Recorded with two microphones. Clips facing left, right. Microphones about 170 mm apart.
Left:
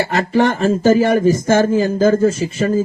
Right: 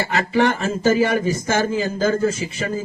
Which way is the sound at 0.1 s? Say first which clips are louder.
Left 3 dB; 40° left (ahead or behind).